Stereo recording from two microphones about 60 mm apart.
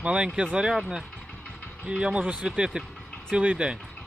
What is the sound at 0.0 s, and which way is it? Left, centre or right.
Speech, centre.